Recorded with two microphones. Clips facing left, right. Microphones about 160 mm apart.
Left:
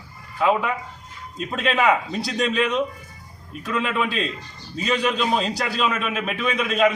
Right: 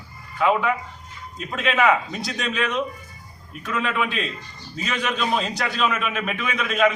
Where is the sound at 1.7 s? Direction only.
20° left (ahead or behind).